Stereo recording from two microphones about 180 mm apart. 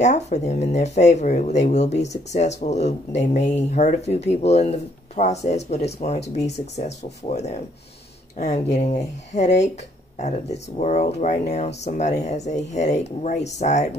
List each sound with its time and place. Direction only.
0.0 s speech: 40° left (ahead or behind)